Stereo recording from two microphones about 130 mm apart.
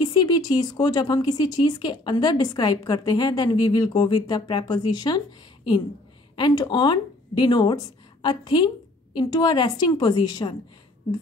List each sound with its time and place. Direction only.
0.0 s speech: 35° left (ahead or behind)
6.3 s speech: 35° left (ahead or behind)